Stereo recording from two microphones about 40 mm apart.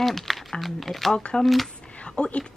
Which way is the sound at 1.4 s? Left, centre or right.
Centre.